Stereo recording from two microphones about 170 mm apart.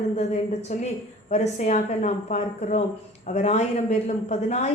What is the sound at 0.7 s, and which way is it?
A woman's voice, 45° left (ahead or behind).